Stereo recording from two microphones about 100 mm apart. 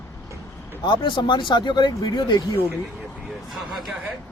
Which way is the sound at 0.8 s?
50° left (ahead or behind).